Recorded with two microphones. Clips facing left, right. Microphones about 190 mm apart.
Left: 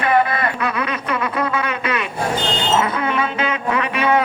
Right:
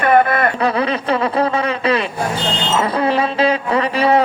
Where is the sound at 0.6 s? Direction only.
30° right (ahead or behind).